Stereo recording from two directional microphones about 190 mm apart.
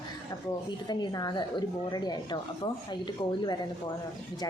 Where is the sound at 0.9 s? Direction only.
20° left (ahead or behind).